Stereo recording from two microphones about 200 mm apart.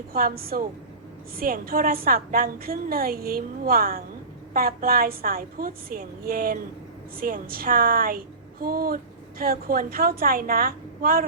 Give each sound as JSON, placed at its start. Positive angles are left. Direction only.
{"t": 0.1, "sound": "a woman's voice", "side_deg": -45}